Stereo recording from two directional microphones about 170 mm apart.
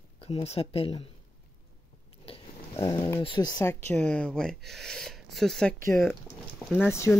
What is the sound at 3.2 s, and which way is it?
Speech, 25° left (ahead or behind).